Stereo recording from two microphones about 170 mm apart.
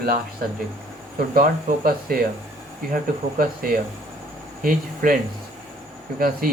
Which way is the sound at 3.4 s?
55° right (ahead or behind).